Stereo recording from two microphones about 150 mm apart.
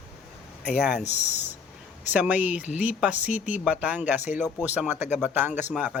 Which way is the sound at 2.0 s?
10° right (ahead or behind).